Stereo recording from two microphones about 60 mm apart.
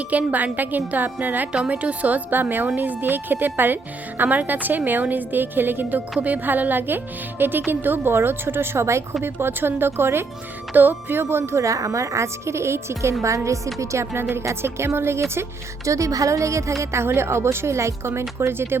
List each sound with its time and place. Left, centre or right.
0.1 s a woman's voice: right
9.2 s a woman's voice: right
11.6 s speech: right
13.2 s speech: right
16.8 s speech: right